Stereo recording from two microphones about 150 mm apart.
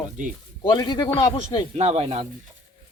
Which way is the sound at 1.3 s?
40° left (ahead or behind).